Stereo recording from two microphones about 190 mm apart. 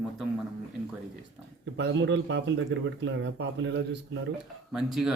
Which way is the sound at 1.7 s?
70° right (ahead or behind).